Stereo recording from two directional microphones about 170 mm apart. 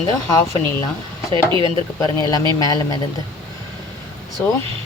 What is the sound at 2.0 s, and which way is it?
Speech, 20° left (ahead or behind).